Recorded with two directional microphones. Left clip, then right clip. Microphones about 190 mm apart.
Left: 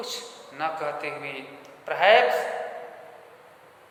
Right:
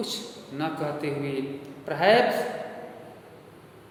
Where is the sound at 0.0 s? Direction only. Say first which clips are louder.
Right 1 dB; 15° right (ahead or behind).